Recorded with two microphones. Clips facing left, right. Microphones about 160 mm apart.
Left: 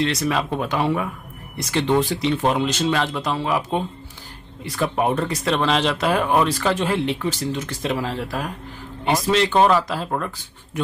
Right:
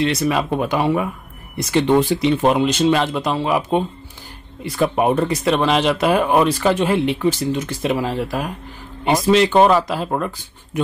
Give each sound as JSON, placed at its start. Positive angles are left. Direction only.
{"t": 0.0, "sound": "speech", "side_deg": -10}